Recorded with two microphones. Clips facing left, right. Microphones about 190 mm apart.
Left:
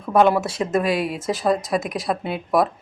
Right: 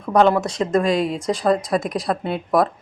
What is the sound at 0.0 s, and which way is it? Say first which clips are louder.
Speech: right 1 dB; 5° left (ahead or behind).